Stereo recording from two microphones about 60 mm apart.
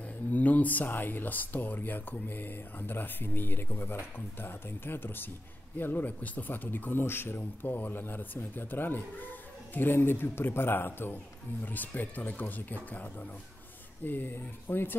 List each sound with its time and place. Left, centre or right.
0.3 s speech: left